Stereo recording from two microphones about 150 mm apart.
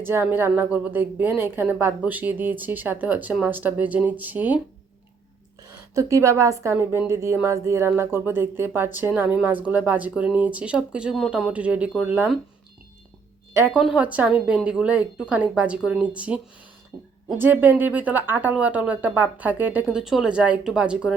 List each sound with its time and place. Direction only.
0.0 s speech: 15° right (ahead or behind)
5.9 s a woman's voice: 20° right (ahead or behind)
13.7 s speech: 10° right (ahead or behind)